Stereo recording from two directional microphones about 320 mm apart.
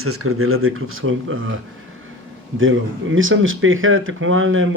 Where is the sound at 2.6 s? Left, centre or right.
Right.